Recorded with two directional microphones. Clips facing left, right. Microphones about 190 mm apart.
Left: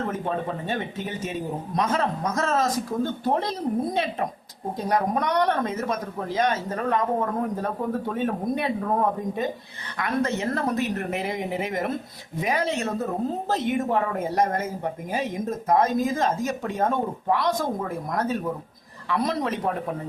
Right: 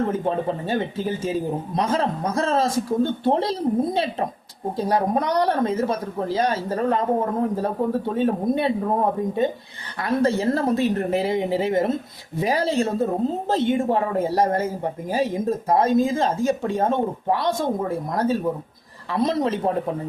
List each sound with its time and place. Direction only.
0.1 s speech: 30° right (ahead or behind)